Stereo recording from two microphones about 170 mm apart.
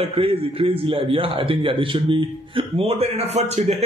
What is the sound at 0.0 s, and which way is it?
A man's voice, 35° right (ahead or behind).